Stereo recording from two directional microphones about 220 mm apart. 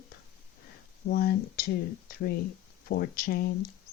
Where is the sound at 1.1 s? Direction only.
45° left (ahead or behind).